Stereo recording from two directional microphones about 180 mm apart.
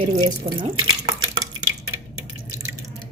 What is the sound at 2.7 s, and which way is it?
Drip, 20° right (ahead or behind).